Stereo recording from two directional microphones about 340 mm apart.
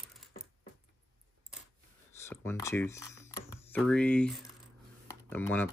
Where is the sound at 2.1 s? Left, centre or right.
Centre.